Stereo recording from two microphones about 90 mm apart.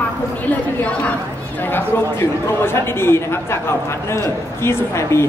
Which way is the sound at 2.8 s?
25° left (ahead or behind).